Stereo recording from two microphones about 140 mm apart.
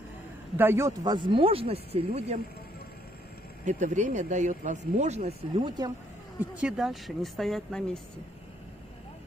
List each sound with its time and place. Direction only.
0.6 s speech: 15° right (ahead or behind); by 2.4 s 50° right (ahead or behind)
3.6 s speech: 60° right (ahead or behind); by 5.9 s 30° right (ahead or behind)
6.5 s speech: 5° right (ahead or behind)